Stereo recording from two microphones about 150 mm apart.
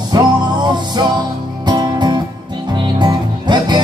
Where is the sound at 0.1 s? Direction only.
30° right (ahead or behind).